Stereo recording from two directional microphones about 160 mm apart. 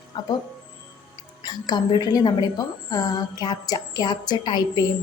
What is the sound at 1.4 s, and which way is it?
Speech, 25° left (ahead or behind).